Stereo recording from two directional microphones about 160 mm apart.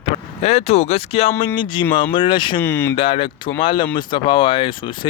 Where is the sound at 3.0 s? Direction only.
35° left (ahead or behind).